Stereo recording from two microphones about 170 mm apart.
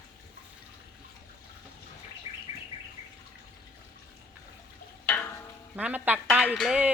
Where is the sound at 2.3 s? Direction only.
35° left (ahead or behind).